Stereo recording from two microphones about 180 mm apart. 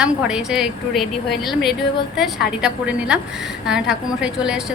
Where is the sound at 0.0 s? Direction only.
5° right (ahead or behind).